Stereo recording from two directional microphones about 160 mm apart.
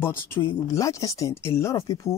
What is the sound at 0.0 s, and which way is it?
Speech, 15° left (ahead or behind).